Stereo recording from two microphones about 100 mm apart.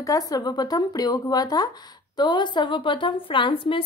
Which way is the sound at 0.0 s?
35° left (ahead or behind).